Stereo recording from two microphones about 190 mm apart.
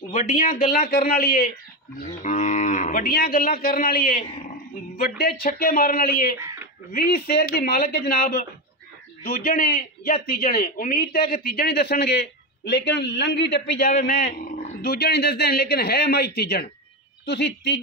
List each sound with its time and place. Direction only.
0.1 s a man's voice: 45° left (ahead or behind)
2.0 s cattle: 40° left (ahead or behind)
4.9 s a man's voice: 55° left (ahead or behind)
6.3 s a sound: 15° right (ahead or behind)
6.9 s a man's voice: 55° left (ahead or behind)
13.9 s a man's voice: 40° left (ahead or behind); by 17.7 s 65° left (ahead or behind)